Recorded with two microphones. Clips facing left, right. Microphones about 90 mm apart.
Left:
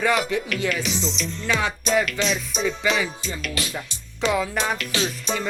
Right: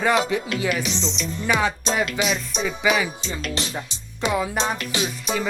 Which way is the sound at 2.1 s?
5° right (ahead or behind).